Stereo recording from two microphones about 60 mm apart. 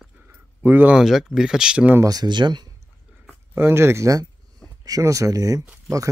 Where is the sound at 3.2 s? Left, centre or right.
Right.